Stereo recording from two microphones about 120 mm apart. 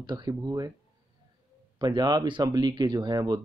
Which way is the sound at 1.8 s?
35° right (ahead or behind).